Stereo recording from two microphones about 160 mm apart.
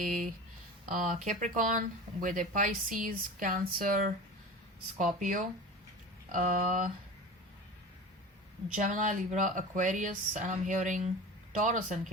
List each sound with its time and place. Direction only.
0.0 s speech: 55° right (ahead or behind)
8.7 s speech: 50° right (ahead or behind)